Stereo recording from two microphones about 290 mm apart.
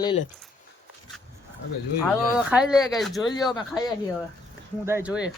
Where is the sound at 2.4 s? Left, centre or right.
Centre.